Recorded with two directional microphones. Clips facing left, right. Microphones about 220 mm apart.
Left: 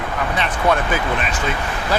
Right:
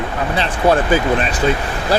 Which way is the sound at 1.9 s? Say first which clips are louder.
Right 4 dB; 35° right (ahead or behind).